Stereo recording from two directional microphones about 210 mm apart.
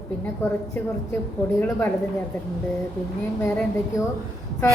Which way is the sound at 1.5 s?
10° left (ahead or behind).